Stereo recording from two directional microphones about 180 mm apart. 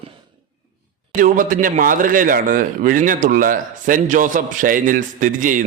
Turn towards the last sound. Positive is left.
turn(degrees=-45)  # may be behind; listen again after turning